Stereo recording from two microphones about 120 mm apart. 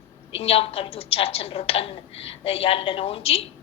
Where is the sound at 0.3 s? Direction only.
55° left (ahead or behind).